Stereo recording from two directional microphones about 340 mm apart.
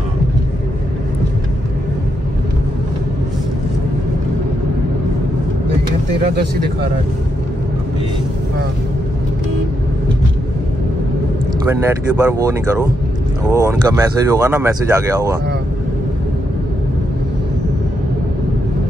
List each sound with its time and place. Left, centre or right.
6.2 s speech: right
11.8 s speech: centre